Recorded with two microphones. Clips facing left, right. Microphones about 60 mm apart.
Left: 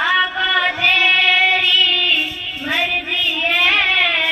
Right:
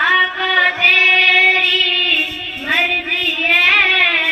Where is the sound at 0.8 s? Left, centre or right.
Right.